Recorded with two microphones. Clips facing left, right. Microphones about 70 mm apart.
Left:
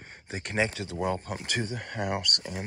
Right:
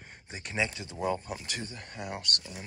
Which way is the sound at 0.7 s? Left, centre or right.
Left.